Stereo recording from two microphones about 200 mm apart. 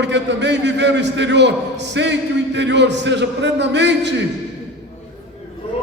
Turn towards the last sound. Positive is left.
turn(degrees=-60)  # may be behind; listen again after turning